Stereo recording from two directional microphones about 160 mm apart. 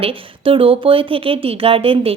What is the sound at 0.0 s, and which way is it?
A woman's voice, 35° right (ahead or behind).